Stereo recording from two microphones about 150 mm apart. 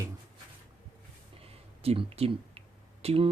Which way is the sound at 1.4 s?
40° right (ahead or behind).